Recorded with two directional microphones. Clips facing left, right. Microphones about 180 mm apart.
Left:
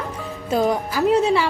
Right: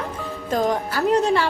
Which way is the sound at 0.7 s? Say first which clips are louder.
Left 2 dB; 5° left (ahead or behind).